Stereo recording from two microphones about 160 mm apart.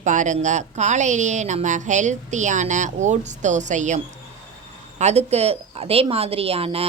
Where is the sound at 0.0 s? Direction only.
50° right (ahead or behind).